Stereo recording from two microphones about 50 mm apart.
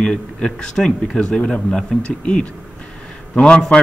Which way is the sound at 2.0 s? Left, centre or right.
Left.